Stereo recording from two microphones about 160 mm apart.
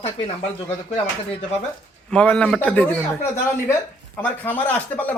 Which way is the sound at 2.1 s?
10° left (ahead or behind).